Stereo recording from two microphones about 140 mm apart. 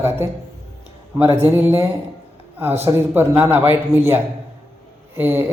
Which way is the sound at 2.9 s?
15° right (ahead or behind).